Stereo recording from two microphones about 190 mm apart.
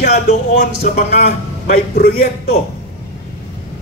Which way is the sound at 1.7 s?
55° left (ahead or behind).